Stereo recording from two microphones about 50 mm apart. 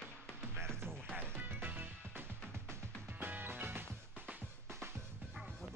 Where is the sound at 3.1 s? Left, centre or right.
Right.